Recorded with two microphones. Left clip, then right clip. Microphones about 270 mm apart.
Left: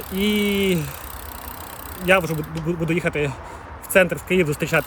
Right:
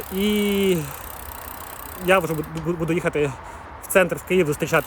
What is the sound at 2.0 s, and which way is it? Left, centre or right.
Speech, centre.